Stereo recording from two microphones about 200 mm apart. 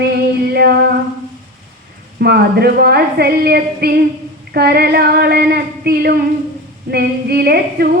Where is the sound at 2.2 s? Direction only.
55° right (ahead or behind).